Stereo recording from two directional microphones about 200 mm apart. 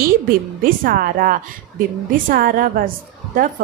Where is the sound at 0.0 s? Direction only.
45° right (ahead or behind).